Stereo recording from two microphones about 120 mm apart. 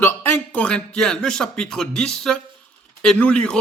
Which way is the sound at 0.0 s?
20° left (ahead or behind).